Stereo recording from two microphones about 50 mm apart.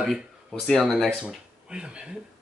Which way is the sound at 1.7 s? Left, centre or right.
Centre.